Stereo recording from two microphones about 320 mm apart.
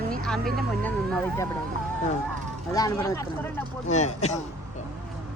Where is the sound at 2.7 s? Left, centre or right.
Centre.